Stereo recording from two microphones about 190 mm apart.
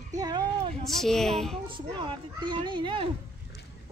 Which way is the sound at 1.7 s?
25° right (ahead or behind).